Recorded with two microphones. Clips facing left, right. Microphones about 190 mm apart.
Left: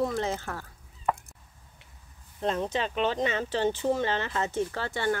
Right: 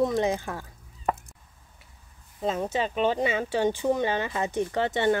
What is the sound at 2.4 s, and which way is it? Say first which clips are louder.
Speech: right 1 dB; 5° right (ahead or behind).